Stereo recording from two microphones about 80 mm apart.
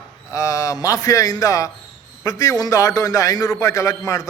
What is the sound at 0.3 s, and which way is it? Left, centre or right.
A man's voice, left.